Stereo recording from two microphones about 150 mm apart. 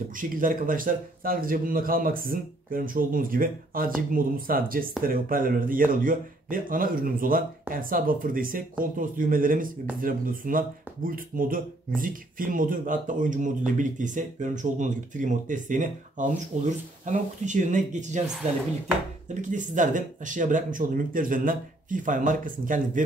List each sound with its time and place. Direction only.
0.1 s a man's voice: 65° right (ahead or behind)
19.2 s speech: 55° right (ahead or behind)